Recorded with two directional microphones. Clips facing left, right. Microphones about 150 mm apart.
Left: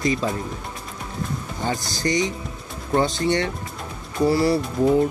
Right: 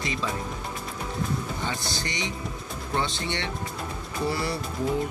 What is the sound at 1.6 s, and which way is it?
Speech, 40° left (ahead or behind).